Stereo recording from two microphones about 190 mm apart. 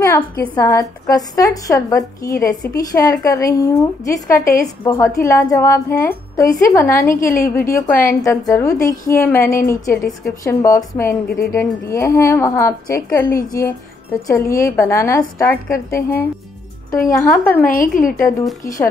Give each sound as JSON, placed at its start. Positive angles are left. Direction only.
{"t": 0.0, "sound": "a woman's voice", "side_deg": 15}
{"t": 17.6, "sound": "a woman's voice", "side_deg": 45}